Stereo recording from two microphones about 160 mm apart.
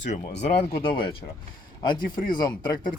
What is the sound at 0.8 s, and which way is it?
Speech, 30° left (ahead or behind).